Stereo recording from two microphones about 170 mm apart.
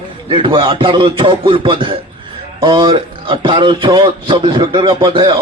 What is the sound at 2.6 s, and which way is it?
A man's voice, 30° right (ahead or behind).